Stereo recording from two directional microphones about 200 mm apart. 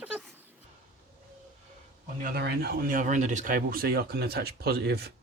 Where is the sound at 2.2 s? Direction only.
55° right (ahead or behind).